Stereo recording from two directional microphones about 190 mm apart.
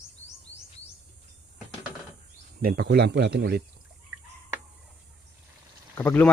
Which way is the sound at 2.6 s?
55° right (ahead or behind).